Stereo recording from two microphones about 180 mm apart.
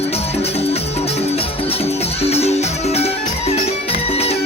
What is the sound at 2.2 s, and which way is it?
Music, 35° left (ahead or behind).